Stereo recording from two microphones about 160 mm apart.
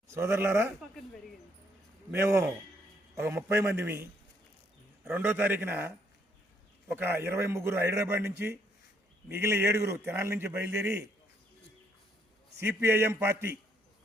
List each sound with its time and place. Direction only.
0.1 s a man's voice: 15° right (ahead or behind)
2.0 s a man's voice: 15° right (ahead or behind)
12.5 s a man's voice: 15° right (ahead or behind)